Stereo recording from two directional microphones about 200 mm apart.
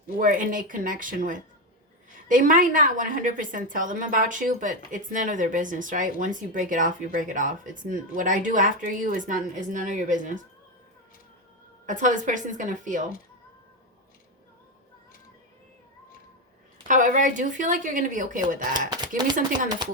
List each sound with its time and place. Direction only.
0.2 s a woman's voice: 40° right (ahead or behind)
11.9 s a woman's voice: 40° right (ahead or behind)
16.9 s a woman's voice: 40° right (ahead or behind)
18.9 s speech: 20° right (ahead or behind)